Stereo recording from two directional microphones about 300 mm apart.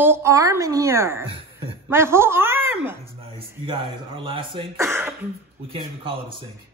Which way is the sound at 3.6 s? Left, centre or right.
Centre.